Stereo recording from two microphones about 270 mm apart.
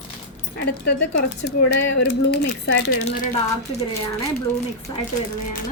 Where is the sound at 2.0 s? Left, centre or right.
Left.